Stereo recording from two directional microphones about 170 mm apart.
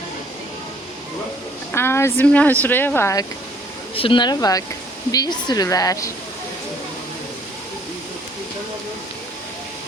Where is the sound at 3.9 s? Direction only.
30° left (ahead or behind).